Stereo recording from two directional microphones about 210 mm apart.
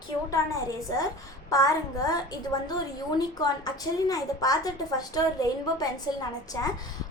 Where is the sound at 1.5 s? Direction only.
15° left (ahead or behind).